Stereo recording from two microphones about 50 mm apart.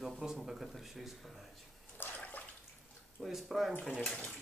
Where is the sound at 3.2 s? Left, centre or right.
Centre.